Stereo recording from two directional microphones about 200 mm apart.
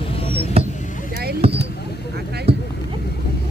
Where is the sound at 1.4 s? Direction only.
30° right (ahead or behind).